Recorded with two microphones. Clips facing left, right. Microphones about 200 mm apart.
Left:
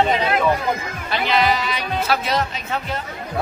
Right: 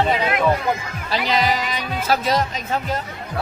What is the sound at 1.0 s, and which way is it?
Speech, 40° right (ahead or behind).